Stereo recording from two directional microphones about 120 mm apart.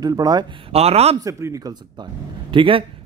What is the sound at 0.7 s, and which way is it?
Speech, 60° right (ahead or behind).